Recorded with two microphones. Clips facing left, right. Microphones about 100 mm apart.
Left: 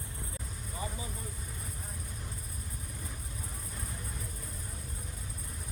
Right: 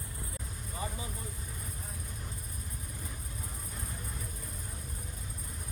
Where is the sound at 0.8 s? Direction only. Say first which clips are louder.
Right 1 dB; 25° right (ahead or behind).